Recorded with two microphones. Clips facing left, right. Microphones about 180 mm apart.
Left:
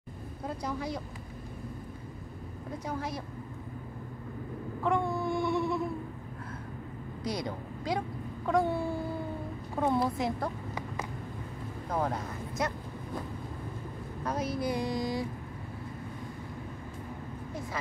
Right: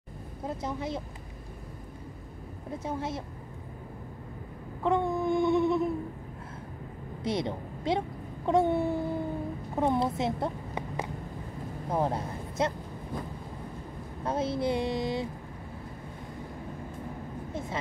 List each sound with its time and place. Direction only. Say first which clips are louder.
0.5 s speech: right 1 dB; 25° right (ahead or behind)
2.8 s speech: right 2 dB; 25° right (ahead or behind)
4.8 s a sound: right 3 dB; 20° right (ahead or behind)
7.2 s a woman's voice: right 4 dB; 25° right (ahead or behind)
8.5 s a sound: right 3 dB; 25° right (ahead or behind)
9.8 s a woman's voice: right 1 dB; 25° right (ahead or behind)
14.2 s speech: right 3 dB; 25° right (ahead or behind)